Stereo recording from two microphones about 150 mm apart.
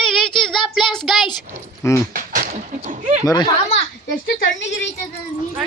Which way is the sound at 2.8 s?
50° right (ahead or behind).